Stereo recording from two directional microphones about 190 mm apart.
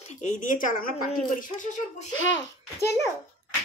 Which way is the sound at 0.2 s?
40° left (ahead or behind).